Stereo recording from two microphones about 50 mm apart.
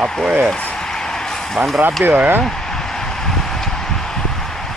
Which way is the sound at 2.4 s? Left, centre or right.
Centre.